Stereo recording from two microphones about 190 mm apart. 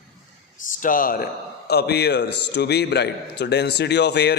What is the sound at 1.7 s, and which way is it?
A man's voice, 60° left (ahead or behind).